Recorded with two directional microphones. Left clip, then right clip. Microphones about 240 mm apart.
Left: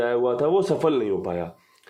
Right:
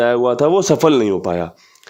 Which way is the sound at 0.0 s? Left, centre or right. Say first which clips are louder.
Right 8 dB; right.